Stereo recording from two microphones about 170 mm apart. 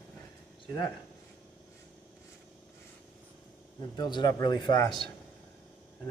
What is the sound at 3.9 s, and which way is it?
Speech, 25° left (ahead or behind).